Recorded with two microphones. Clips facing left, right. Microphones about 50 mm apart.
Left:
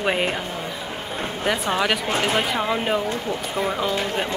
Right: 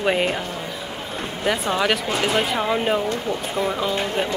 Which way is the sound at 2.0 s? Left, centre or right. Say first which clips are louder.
Even; left.